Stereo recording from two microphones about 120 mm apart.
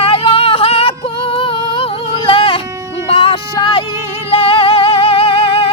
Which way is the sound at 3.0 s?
50° left (ahead or behind).